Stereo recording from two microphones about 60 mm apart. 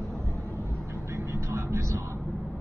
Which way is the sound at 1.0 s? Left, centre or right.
Right.